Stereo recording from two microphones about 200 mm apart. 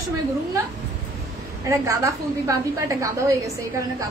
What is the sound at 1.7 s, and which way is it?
A woman's voice, 15° right (ahead or behind).